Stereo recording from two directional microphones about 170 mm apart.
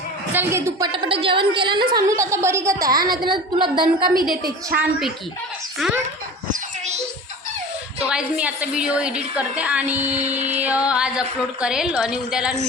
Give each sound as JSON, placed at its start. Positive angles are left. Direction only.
{"t": 0.3, "sound": "a woman's voice", "side_deg": -15}
{"t": 0.9, "sound": "a woman's voice", "side_deg": -30}
{"t": 4.0, "sound": "a woman's voice", "side_deg": -55}
{"t": 4.8, "sound": "a woman's voice", "side_deg": -5}
{"t": 7.9, "sound": "a woman's voice", "side_deg": -5}
{"t": 10.2, "sound": "music", "side_deg": -40}
{"t": 10.6, "sound": "a woman's voice", "side_deg": -10}